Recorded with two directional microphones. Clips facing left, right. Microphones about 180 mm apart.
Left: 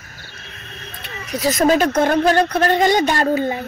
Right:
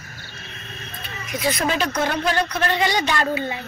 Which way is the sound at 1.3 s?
40° left (ahead or behind).